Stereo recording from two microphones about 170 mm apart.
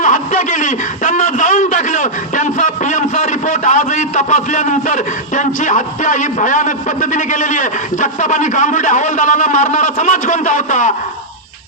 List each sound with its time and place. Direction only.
0.0 s a man's voice: 45° left (ahead or behind)